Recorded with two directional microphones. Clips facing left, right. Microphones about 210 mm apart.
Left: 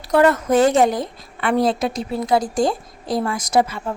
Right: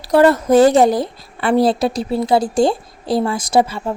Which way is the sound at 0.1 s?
35° right (ahead or behind).